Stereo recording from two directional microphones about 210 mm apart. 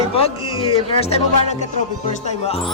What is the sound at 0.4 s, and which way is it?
Music, 90° left.